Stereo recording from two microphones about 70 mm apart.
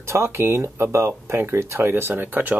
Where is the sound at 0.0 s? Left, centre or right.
Right.